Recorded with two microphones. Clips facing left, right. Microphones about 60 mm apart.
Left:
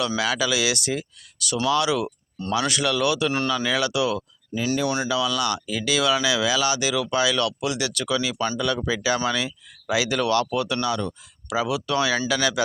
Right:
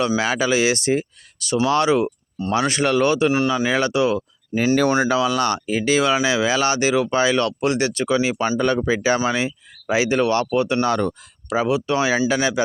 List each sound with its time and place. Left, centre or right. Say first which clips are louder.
0.2 s speech: right 4 dB; right
3.3 s speech: right 5 dB; centre
3.7 s speech: right 4 dB; right
10.8 s speech: right 5 dB; right